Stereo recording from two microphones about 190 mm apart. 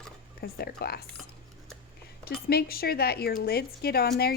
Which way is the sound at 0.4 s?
55° left (ahead or behind).